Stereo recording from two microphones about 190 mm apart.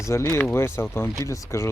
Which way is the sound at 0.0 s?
15° left (ahead or behind).